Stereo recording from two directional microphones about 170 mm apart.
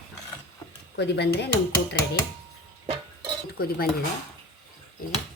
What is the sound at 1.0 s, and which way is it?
Speech, 75° left (ahead or behind).